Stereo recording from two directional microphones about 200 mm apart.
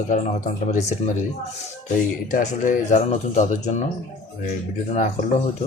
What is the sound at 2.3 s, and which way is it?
Speech, 40° left (ahead or behind).